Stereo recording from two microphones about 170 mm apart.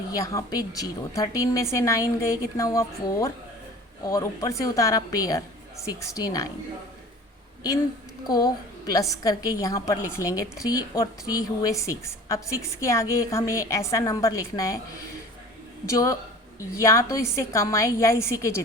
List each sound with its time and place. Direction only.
0.1 s a woman's voice: 20° left (ahead or behind)
8.3 s a woman's voice: 20° left (ahead or behind)